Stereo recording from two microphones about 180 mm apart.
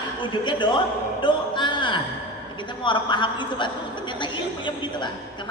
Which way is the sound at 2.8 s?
25° left (ahead or behind).